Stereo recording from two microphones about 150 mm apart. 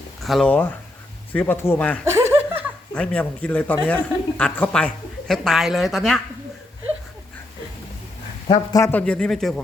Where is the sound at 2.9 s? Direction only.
5° left (ahead or behind).